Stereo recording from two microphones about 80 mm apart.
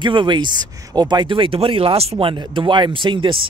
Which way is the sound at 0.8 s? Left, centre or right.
Right.